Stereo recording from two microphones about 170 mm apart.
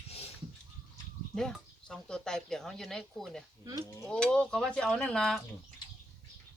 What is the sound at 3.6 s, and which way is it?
Speech, 20° right (ahead or behind).